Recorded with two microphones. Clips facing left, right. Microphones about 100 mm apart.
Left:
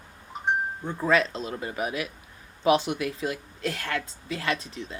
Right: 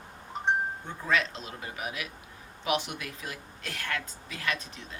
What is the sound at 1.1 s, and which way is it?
Speech, 35° left (ahead or behind).